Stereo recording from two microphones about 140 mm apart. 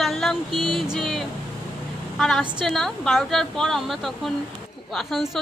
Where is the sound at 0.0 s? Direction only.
5° left (ahead or behind).